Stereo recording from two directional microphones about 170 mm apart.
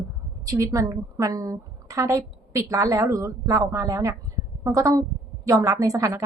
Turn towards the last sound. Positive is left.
turn(degrees=-20)  # may be behind; listen again after turning